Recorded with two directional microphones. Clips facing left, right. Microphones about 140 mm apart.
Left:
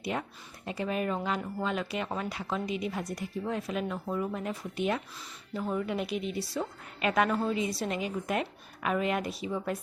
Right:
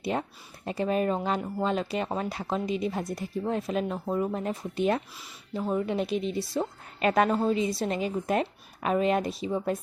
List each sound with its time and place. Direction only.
0.0 s a woman's voice: 30° right (ahead or behind)